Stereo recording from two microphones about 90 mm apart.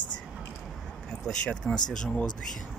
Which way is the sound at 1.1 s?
10° left (ahead or behind).